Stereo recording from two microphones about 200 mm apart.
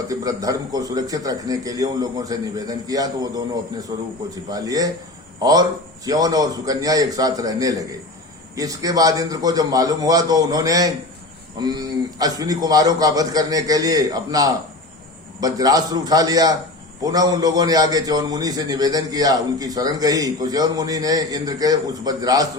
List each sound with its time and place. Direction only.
0.1 s a man's voice: 15° right (ahead or behind)